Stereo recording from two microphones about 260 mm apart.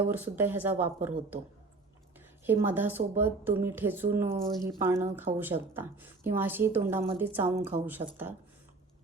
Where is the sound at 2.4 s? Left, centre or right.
Centre.